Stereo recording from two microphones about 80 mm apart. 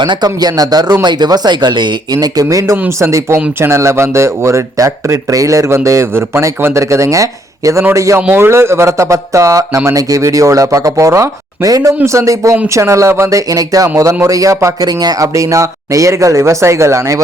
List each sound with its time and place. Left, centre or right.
0.1 s speech: right
2.2 s speech: right